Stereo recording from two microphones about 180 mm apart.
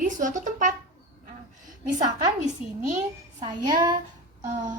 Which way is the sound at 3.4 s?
20° right (ahead or behind).